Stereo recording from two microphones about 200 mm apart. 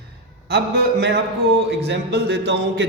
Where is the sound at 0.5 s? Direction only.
55° right (ahead or behind).